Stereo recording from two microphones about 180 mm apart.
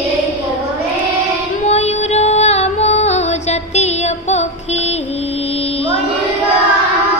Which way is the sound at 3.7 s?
40° left (ahead or behind).